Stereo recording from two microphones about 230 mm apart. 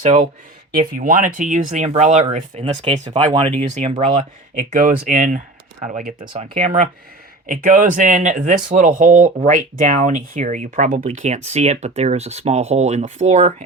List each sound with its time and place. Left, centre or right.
0.0 s speech: right
6.2 s speech: right